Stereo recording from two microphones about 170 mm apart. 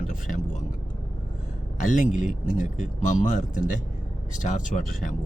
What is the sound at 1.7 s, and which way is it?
A man's voice, 50° left (ahead or behind).